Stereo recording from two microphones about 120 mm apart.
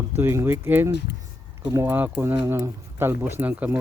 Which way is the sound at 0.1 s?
20° right (ahead or behind).